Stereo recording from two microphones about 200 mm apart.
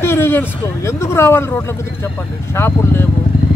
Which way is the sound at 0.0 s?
10° left (ahead or behind).